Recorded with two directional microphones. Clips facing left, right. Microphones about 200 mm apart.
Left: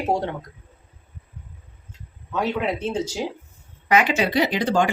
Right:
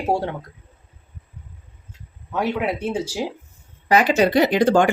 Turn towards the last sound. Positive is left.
turn(degrees=-50)  # may be behind; listen again after turning